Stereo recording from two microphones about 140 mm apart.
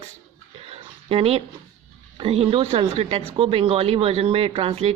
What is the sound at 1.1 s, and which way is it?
Speech, 45° right (ahead or behind).